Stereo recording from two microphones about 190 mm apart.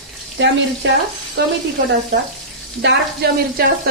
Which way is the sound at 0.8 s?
70° right (ahead or behind).